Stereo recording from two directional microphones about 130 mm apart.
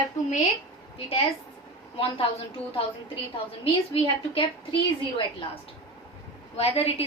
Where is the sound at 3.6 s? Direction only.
45° left (ahead or behind).